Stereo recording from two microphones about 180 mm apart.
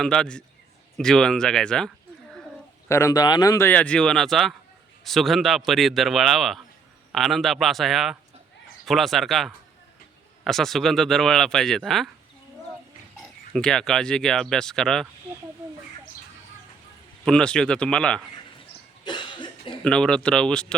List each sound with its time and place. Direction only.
0.0 s speech: 5° left (ahead or behind)
2.9 s speech: 20° left (ahead or behind); by 12.1 s centre (ahead or behind)
13.5 s speech: 5° left (ahead or behind)
17.2 s speech: 5° left (ahead or behind)
19.0 s cough: 25° left (ahead or behind)
19.8 s speech: 5° left (ahead or behind)